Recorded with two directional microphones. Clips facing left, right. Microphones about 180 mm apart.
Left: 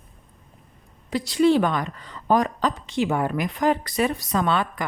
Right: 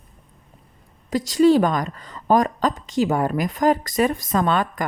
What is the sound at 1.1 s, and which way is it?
Speech, 45° right (ahead or behind).